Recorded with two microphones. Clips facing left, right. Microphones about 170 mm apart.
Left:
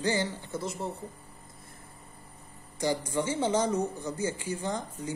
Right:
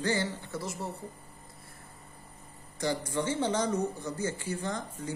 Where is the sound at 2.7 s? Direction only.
15° left (ahead or behind).